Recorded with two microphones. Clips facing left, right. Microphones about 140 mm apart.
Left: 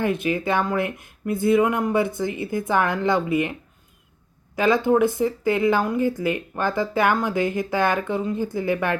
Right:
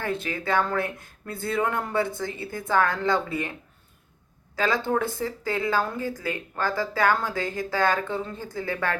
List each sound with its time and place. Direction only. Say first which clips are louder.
0.0 s speech: left 7 dB; 20° left (ahead or behind)
4.5 s speech: left 6 dB; 20° left (ahead or behind)